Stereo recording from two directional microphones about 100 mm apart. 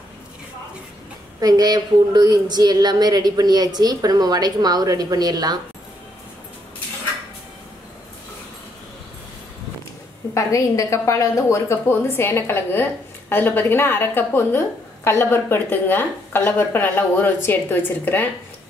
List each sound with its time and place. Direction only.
1.4 s speech: 40° right (ahead or behind)
10.3 s a woman's voice: 30° left (ahead or behind)